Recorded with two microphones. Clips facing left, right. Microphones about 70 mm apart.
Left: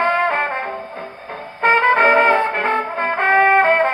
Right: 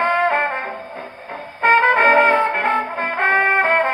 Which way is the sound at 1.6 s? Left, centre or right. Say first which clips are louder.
Even; centre.